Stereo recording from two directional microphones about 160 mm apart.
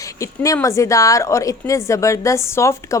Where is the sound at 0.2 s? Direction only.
20° left (ahead or behind).